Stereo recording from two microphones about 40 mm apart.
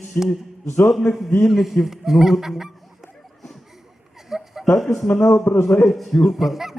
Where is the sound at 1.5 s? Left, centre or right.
Centre.